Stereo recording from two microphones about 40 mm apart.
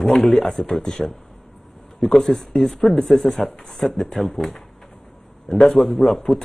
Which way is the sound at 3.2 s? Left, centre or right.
Centre.